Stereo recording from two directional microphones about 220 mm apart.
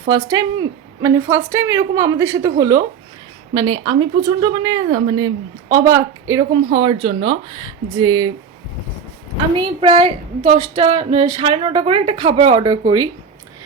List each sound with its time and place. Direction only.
0.1 s a woman's voice: 15° right (ahead or behind)
9.8 s speech: 25° right (ahead or behind)